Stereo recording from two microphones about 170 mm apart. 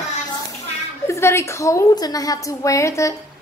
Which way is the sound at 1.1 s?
15° left (ahead or behind).